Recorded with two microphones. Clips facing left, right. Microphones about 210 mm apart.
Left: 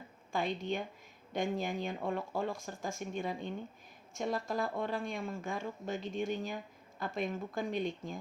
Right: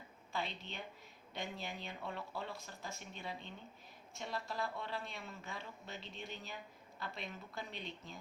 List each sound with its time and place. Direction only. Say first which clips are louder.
0.3 s speech: left 9 dB; 50° left (ahead or behind)